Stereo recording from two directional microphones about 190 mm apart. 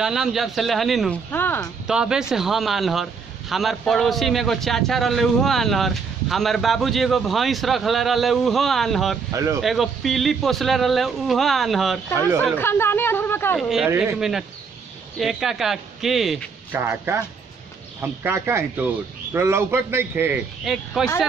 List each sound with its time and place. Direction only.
0.0 s a man's voice: centre (ahead or behind)
1.3 s speech: 10° left (ahead or behind)
1.9 s a man's voice: 5° right (ahead or behind)
9.3 s a man's voice: 15° right (ahead or behind)
9.6 s a man's voice: centre (ahead or behind)
12.5 s speech: 10° left (ahead or behind)
13.6 s a man's voice: centre (ahead or behind)
16.8 s a man's voice: 10° right (ahead or behind)
20.6 s a man's voice: centre (ahead or behind)